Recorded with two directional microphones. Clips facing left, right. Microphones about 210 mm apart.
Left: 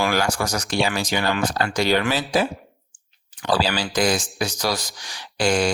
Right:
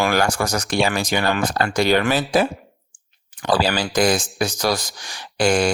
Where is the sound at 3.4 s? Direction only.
55° right (ahead or behind).